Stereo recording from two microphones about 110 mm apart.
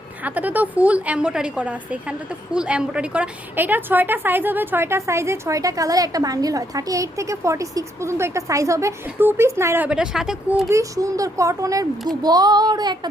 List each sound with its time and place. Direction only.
0.3 s a woman's voice: 15° right (ahead or behind)
9.8 s speech: 5° right (ahead or behind)
10.7 s speech: 30° right (ahead or behind)